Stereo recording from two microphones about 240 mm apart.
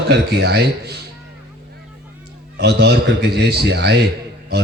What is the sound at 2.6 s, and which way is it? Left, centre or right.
A man's voice, right.